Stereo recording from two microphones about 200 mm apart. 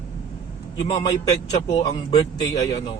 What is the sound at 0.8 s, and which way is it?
A man's voice, 30° left (ahead or behind).